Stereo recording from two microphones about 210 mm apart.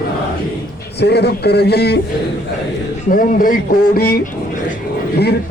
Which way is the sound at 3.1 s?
40° left (ahead or behind).